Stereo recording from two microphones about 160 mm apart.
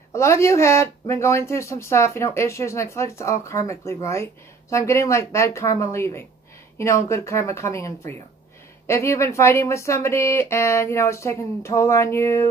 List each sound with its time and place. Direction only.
0.1 s speech: 15° left (ahead or behind)